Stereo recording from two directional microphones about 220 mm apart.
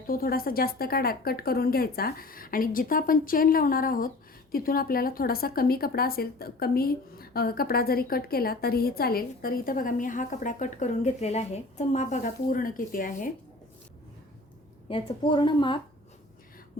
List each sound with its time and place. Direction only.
0.1 s a woman's voice: 40° left (ahead or behind)
14.8 s speech: 25° left (ahead or behind)